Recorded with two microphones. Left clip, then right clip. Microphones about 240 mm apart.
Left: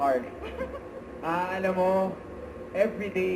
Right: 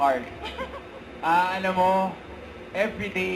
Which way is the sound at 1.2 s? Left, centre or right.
Centre.